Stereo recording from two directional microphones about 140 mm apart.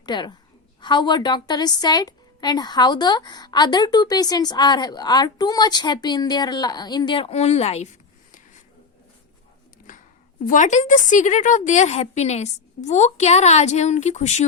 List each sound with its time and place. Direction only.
0.0 s a woman's voice: 30° left (ahead or behind); by 8.6 s 60° left (ahead or behind)
10.4 s a woman's voice: 65° left (ahead or behind)